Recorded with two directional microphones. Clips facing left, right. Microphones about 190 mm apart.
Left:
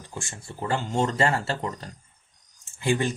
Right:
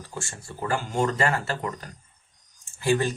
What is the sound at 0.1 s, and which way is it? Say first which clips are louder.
Speech: left 1 dB; 20° left (ahead or behind).